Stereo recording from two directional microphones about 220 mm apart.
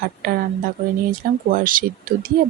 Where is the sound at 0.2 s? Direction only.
40° right (ahead or behind).